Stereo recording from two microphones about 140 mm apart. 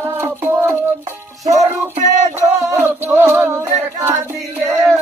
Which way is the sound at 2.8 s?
15° right (ahead or behind).